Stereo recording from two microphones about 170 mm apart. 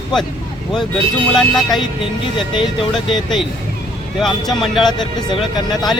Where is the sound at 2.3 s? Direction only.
30° left (ahead or behind).